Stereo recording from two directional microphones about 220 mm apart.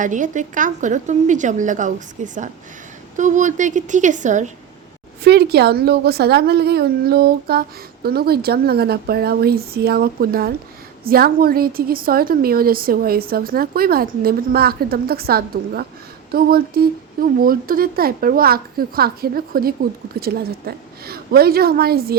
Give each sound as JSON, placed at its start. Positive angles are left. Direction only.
{"t": 0.0, "sound": "a woman's voice", "side_deg": -35}
{"t": 5.2, "sound": "speech", "side_deg": -50}